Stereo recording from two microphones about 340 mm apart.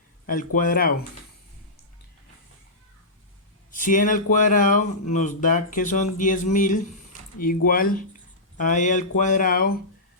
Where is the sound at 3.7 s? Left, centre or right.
Left.